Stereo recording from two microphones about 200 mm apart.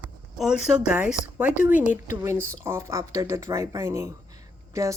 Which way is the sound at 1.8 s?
40° left (ahead or behind).